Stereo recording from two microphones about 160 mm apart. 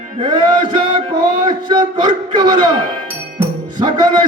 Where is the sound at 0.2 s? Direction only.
30° right (ahead or behind).